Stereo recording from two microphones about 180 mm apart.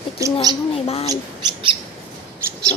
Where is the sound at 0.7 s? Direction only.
35° left (ahead or behind).